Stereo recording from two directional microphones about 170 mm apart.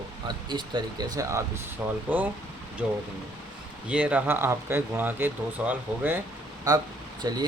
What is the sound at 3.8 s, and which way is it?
Speech, 5° right (ahead or behind).